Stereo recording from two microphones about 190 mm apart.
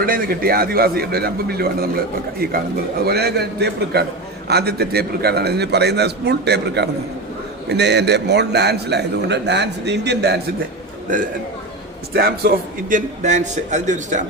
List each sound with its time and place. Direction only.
0.0 s a man's voice: 50° right (ahead or behind)
3.0 s a man's voice: 55° right (ahead or behind)
12.1 s a man's voice: 55° right (ahead or behind)